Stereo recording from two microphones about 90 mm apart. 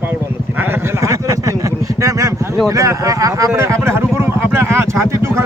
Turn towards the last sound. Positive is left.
turn(degrees=-30)  # may be behind; listen again after turning